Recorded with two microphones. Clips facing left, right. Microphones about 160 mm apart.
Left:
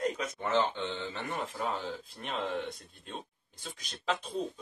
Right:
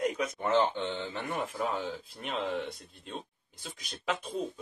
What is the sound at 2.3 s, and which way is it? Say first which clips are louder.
Speech: right 1 dB; centre (ahead or behind).